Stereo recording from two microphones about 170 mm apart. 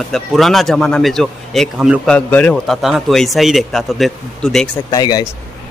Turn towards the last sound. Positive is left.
turn(degrees=20)  # may be behind; listen again after turning